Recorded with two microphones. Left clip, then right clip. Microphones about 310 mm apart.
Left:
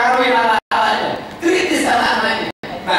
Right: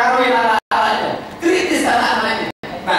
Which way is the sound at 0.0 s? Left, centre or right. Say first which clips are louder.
Even; centre.